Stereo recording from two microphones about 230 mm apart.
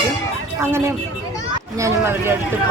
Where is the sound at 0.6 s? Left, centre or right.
Centre.